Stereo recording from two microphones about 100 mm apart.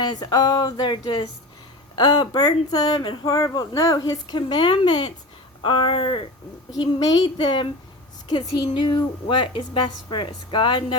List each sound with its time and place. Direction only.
0.0 s a woman's voice: 45° left (ahead or behind)
4.4 s a woman's voice: 50° left (ahead or behind)
6.7 s speech: 40° left (ahead or behind)
7.3 s a woman's voice: 55° left (ahead or behind)